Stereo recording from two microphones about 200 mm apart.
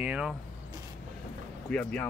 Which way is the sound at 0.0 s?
5° right (ahead or behind).